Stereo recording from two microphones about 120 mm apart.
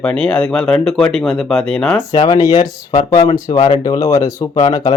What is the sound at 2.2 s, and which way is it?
Speech, 30° left (ahead or behind).